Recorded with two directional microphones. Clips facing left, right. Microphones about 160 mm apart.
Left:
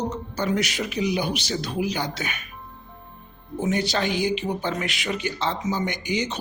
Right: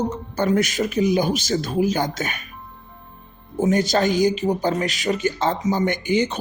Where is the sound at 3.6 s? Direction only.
45° right (ahead or behind).